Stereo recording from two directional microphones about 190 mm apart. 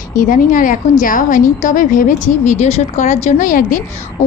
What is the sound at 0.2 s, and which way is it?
A woman's voice, 45° left (ahead or behind).